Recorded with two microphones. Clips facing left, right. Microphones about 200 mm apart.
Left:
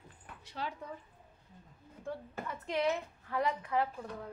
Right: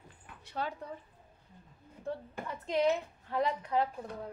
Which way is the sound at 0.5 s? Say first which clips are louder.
Right 3 dB; 50° right (ahead or behind).